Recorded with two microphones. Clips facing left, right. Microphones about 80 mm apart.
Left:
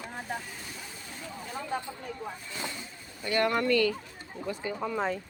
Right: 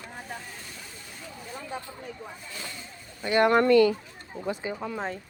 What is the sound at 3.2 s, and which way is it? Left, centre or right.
Speech, right.